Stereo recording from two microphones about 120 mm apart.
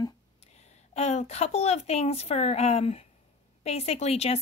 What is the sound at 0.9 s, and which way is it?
A woman's voice, 65° left (ahead or behind).